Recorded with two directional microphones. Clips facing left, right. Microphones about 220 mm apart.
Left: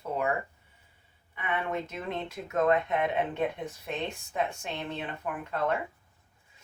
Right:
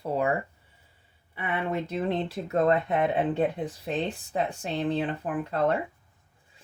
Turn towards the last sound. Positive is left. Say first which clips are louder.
# right 4 dB
turn(degrees=-35)  # may be behind; listen again after turning